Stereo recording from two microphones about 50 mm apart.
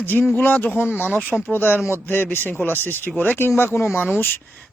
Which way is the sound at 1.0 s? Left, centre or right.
Left.